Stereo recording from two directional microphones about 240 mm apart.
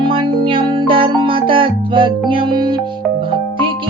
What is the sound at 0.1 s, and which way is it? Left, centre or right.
Music, right.